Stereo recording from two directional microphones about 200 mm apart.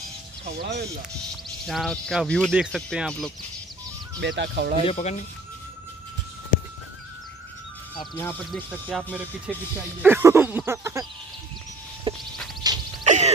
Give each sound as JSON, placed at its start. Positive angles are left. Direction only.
{"t": 0.6, "sound": "speech", "side_deg": -55}
{"t": 1.7, "sound": "speech", "side_deg": 0}
{"t": 4.2, "sound": "speech", "side_deg": -60}
{"t": 4.8, "sound": "speech", "side_deg": 35}
{"t": 7.9, "sound": "music", "side_deg": 25}
{"t": 8.8, "sound": "a sound", "side_deg": -5}
{"t": 12.1, "sound": "music", "side_deg": -25}
{"t": 12.6, "sound": "a sound", "side_deg": -20}
{"t": 13.0, "sound": "music", "side_deg": -35}